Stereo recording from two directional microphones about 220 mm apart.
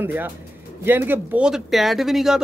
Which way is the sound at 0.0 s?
10° right (ahead or behind).